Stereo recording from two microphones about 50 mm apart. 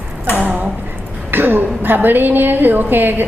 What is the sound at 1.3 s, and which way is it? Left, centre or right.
A woman's voice, right.